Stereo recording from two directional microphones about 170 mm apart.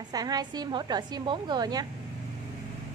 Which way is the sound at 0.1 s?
20° right (ahead or behind).